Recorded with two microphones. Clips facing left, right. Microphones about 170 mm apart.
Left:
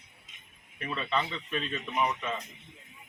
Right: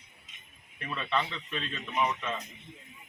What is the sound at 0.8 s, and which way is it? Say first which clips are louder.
A man's voice: left 1 dB; 15° left (ahead or behind).